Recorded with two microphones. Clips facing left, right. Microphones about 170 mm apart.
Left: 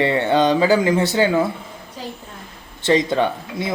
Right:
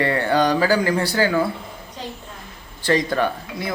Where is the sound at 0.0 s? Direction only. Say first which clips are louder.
Left 2 dB; 20° left (ahead or behind).